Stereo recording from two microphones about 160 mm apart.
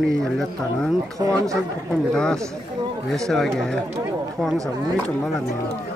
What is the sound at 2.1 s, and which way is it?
A man's voice, 5° left (ahead or behind).